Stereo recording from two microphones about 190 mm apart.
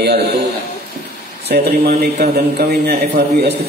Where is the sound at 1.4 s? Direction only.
55° right (ahead or behind).